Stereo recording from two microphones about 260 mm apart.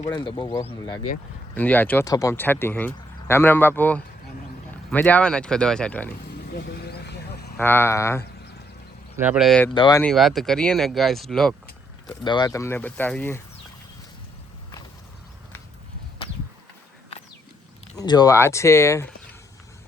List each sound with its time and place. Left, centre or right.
0.0 s speech: centre
6.3 s vehicle: left
7.5 s speech: centre
9.1 s speech: centre
9.7 s speech: centre
10.0 s speech: centre
12.0 s speech: centre
17.9 s speech: centre